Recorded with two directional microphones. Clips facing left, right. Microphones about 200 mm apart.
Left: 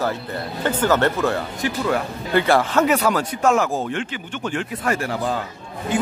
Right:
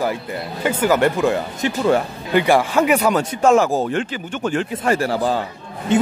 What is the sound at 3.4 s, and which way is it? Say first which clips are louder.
Speech: right 5 dB; 30° right (ahead or behind).